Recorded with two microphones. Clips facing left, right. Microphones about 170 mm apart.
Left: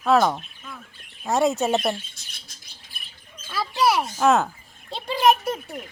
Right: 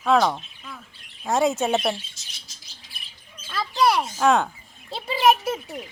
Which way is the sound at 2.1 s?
55° left (ahead or behind).